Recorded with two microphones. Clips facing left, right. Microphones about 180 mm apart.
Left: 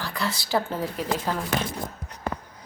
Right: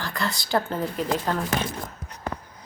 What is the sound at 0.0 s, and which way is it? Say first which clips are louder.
Speech: even; 5° left (ahead or behind).